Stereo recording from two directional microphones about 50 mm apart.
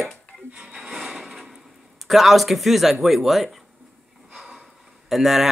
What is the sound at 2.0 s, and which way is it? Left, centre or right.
Speech, centre.